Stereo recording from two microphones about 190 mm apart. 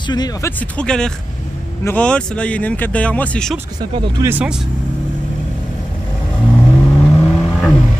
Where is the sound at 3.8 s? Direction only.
20° right (ahead or behind).